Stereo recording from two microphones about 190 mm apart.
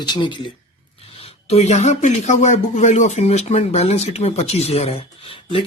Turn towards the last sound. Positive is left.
turn(degrees=30)  # may be behind; listen again after turning